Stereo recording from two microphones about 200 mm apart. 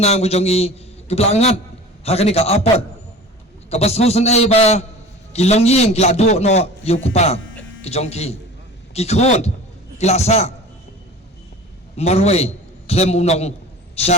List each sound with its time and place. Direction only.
0.0 s a man's voice: 30° left (ahead or behind)
11.9 s a man's voice: 30° left (ahead or behind)